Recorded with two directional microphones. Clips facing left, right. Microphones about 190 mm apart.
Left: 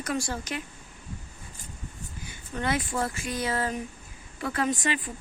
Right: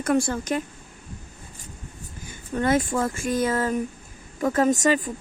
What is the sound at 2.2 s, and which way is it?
Speech, 45° right (ahead or behind).